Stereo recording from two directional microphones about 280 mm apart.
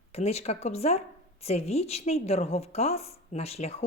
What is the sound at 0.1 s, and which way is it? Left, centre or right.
A woman's voice, left.